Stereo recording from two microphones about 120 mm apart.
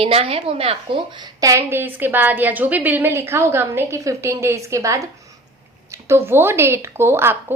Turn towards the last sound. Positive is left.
turn(degrees=-20)  # may be behind; listen again after turning